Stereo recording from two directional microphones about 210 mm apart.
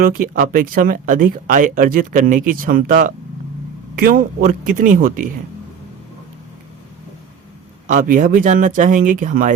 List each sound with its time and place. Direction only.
0.0 s speech: 40° right (ahead or behind)
7.9 s speech: 40° right (ahead or behind)